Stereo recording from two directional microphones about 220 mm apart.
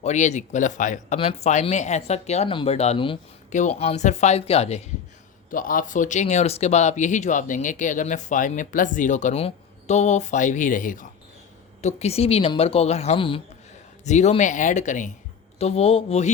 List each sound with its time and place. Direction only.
0.0 s speech: 30° left (ahead or behind)
5.5 s speech: 40° left (ahead or behind)